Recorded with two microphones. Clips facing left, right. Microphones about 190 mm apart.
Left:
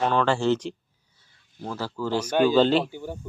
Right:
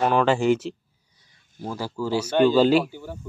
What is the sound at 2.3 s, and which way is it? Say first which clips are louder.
Speech: right 2 dB; 10° left (ahead or behind).